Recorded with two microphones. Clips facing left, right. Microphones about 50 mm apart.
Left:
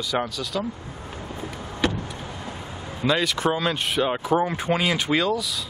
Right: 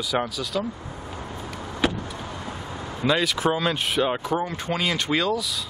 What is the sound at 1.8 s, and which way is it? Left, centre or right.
Vehicle, centre.